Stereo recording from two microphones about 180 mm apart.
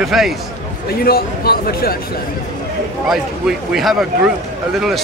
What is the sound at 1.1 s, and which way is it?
Speech, 55° left (ahead or behind).